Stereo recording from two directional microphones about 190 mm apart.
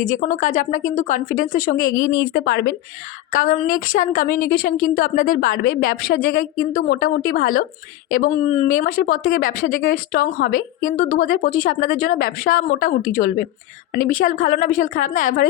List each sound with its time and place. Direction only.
0.1 s a woman's voice: 40° left (ahead or behind)
2.0 s speech: 70° left (ahead or behind)
3.3 s a woman's voice: 45° left (ahead or behind)